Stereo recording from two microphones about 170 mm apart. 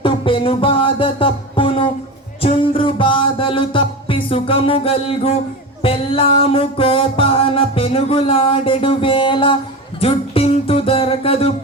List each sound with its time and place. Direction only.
0.0 s music: 30° left (ahead or behind)